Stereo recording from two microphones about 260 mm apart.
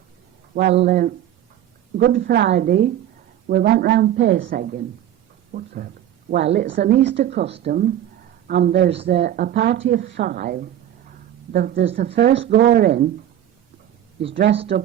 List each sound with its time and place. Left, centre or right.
0.5 s speech: right
2.0 s speech: right
10.2 s speech: right